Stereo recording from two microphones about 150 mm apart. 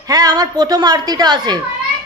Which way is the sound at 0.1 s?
25° right (ahead or behind).